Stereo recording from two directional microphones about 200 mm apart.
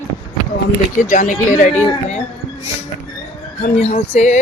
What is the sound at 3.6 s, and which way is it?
Speech, 35° left (ahead or behind).